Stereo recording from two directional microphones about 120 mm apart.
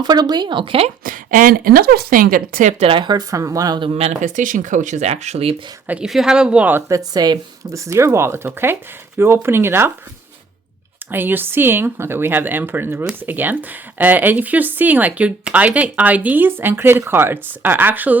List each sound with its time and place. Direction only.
0.0 s speech: 35° right (ahead or behind)
2.6 s speech: 90° right
2.8 s speech: 45° right (ahead or behind); by 3.8 s 30° right (ahead or behind)
3.9 s speech: 75° right (ahead or behind); by 5.5 s 60° right (ahead or behind)
5.9 s speech: 5° right (ahead or behind)
6.8 s speech: 30° right (ahead or behind)
11.1 s speech: 15° right (ahead or behind)